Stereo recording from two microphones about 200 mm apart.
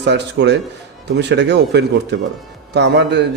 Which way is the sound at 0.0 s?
60° right (ahead or behind).